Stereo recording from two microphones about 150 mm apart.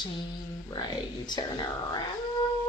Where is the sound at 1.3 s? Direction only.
30° left (ahead or behind).